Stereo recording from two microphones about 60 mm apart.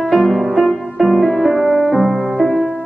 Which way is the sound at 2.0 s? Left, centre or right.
Left.